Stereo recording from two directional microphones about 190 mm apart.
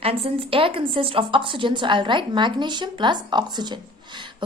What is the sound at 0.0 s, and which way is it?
A woman's voice, 30° right (ahead or behind).